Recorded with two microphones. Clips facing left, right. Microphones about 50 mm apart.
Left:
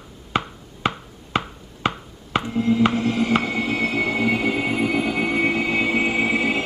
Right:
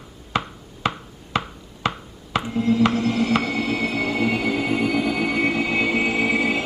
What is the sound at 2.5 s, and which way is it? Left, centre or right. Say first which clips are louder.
Music: even; centre.